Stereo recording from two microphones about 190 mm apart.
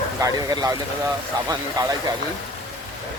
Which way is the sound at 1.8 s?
20° right (ahead or behind).